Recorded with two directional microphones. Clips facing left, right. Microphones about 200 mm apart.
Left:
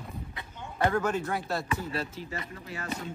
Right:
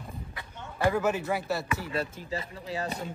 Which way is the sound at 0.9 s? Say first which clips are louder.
Right 2 dB; 5° right (ahead or behind).